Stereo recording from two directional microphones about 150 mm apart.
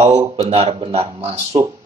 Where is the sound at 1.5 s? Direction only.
20° right (ahead or behind).